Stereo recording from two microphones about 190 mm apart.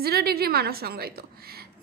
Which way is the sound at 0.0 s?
55° right (ahead or behind).